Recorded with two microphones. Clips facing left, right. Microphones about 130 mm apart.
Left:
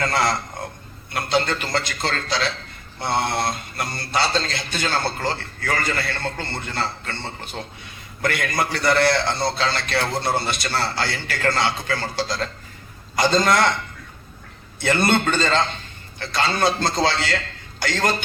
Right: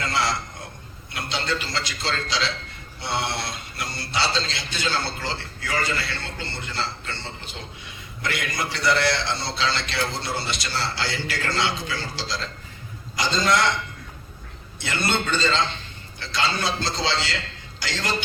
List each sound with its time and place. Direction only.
0.0 s a man's voice: 50° left (ahead or behind)
14.8 s a man's voice: 50° left (ahead or behind)